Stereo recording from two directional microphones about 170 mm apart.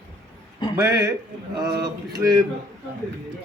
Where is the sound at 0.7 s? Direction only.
20° right (ahead or behind).